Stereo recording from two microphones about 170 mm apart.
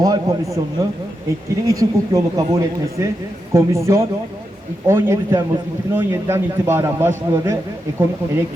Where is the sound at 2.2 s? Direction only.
20° right (ahead or behind).